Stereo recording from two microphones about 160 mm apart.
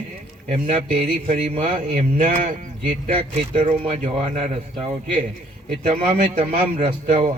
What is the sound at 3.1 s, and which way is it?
A man's voice, 35° right (ahead or behind).